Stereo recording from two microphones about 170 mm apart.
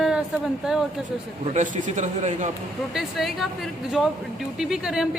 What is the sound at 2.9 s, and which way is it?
Speech, centre (ahead or behind).